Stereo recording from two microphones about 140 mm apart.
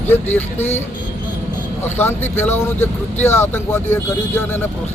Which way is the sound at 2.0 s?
15° left (ahead or behind).